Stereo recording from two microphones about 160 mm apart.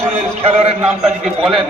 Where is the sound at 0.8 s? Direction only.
5° right (ahead or behind).